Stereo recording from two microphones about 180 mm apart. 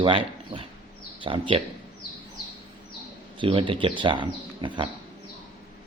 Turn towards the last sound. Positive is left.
turn(degrees=-25)  # may be behind; listen again after turning